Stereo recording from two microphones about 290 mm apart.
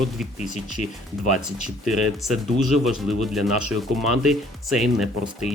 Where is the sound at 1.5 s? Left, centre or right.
Centre.